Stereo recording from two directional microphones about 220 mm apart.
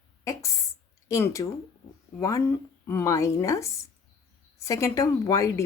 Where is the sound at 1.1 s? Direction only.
15° left (ahead or behind).